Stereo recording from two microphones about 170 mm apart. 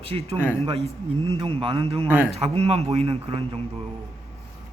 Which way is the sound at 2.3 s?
35° right (ahead or behind).